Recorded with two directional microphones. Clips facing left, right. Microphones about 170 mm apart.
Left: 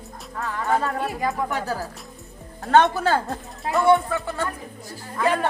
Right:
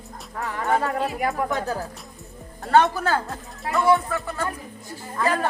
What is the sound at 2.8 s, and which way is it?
Speech, 25° left (ahead or behind).